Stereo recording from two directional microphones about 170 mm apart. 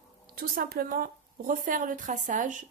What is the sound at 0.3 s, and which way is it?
A woman's voice, 55° right (ahead or behind).